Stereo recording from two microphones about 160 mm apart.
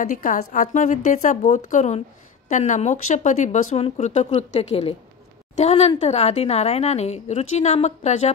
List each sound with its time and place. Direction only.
0.1 s a woman's voice: 55° left (ahead or behind)